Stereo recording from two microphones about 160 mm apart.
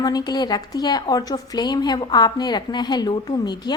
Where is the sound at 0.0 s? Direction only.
25° left (ahead or behind).